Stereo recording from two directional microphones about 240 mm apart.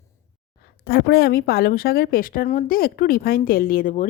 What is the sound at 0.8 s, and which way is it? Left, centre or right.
Speech, left.